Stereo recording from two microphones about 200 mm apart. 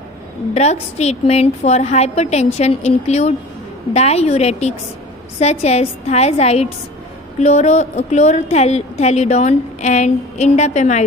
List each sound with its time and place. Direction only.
0.6 s a woman's voice: 35° left (ahead or behind)